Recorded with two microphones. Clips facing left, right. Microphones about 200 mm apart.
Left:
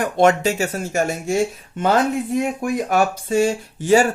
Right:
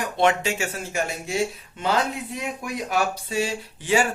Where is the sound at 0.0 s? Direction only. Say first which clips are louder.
Left 6 dB; 45° left (ahead or behind).